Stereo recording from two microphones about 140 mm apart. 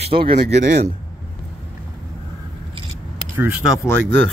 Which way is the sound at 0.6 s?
60° right (ahead or behind).